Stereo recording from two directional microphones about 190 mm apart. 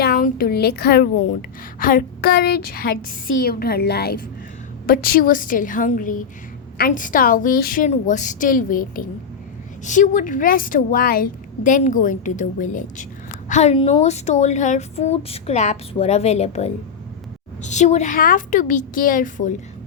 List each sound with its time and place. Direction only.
0.0 s a woman's voice: 50° left (ahead or behind)